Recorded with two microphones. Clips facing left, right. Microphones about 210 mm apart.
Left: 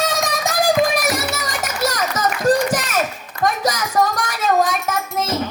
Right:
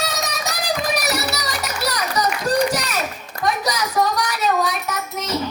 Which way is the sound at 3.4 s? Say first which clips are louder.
Left 1 dB; 50° left (ahead or behind).